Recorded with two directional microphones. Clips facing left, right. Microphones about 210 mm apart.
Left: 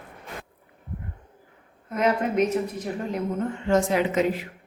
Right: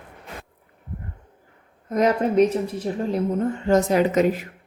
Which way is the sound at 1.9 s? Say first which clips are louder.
Right 4 dB; 40° right (ahead or behind).